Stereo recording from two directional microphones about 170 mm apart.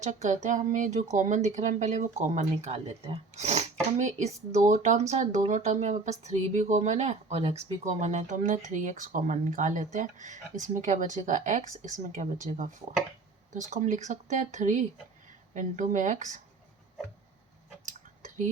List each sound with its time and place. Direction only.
0.0 s a woman's voice: 45° right (ahead or behind)